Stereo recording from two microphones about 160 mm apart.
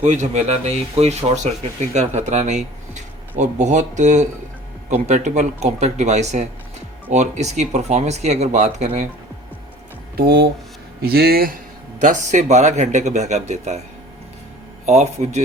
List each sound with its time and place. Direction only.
0.0 s speech: 45° right (ahead or behind)
10.2 s a man's voice: 80° right
11.9 s speech: 50° right (ahead or behind)
14.8 s speech: 45° right (ahead or behind)